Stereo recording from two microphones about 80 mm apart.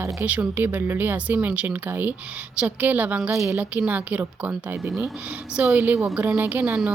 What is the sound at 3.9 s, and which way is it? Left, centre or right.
A woman's voice, centre.